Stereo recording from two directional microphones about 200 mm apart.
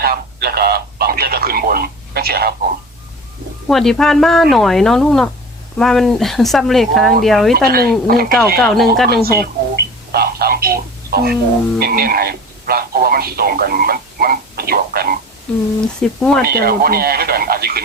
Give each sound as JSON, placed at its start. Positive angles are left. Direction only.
{"t": 0.0, "sound": "speech", "side_deg": -50}
{"t": 3.7, "sound": "speech", "side_deg": 0}
{"t": 7.5, "sound": "speech", "side_deg": -50}
{"t": 8.6, "sound": "speech", "side_deg": 0}
{"t": 9.2, "sound": "telephone", "side_deg": -50}
{"t": 11.8, "sound": "speech", "side_deg": -50}
{"t": 16.0, "sound": "speech", "side_deg": 5}
{"t": 16.4, "sound": "speech", "side_deg": -50}